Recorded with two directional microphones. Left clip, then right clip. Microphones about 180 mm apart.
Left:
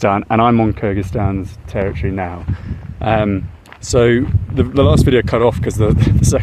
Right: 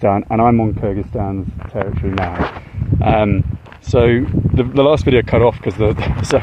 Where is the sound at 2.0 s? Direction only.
10° left (ahead or behind).